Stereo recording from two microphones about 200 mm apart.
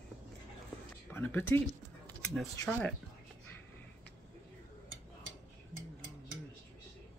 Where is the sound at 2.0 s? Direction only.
Centre (ahead or behind).